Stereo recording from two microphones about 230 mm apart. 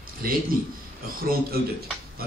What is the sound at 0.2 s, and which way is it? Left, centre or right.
A man's voice, right.